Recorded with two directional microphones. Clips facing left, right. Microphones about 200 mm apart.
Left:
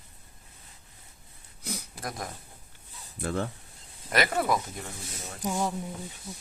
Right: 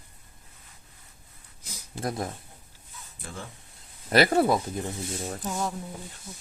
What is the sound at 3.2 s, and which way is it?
Speech, 65° left (ahead or behind).